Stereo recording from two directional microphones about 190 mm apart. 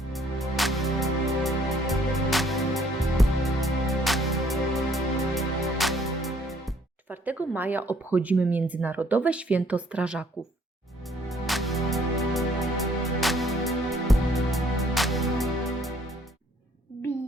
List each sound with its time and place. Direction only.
0.1 s music: centre (ahead or behind)
11.3 s music: centre (ahead or behind)